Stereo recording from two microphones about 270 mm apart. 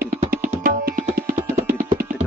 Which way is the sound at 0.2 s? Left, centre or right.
Right.